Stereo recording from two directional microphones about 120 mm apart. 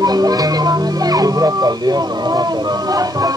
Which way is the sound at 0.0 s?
35° right (ahead or behind).